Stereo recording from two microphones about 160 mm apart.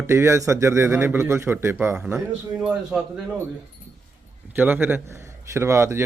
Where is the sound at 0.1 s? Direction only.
15° right (ahead or behind).